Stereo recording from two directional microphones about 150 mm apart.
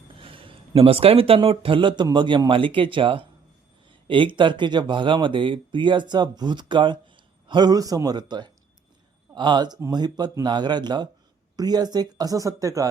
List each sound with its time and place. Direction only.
0.2 s speech: 35° right (ahead or behind)